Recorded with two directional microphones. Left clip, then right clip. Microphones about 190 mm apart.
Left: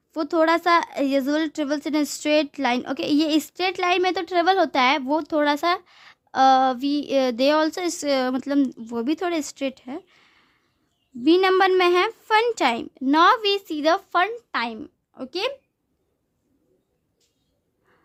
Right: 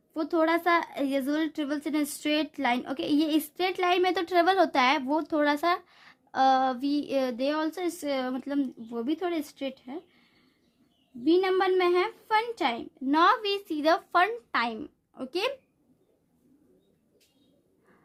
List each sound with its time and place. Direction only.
0.1 s a woman's voice: 30° left (ahead or behind)